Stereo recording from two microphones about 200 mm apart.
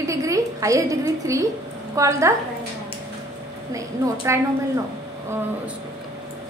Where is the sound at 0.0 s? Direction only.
15° right (ahead or behind).